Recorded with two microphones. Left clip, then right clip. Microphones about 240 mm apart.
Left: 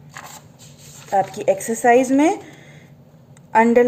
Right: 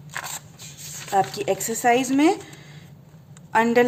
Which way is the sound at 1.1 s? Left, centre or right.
Right.